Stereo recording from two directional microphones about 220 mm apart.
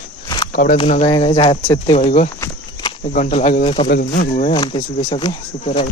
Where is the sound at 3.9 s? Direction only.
40° left (ahead or behind).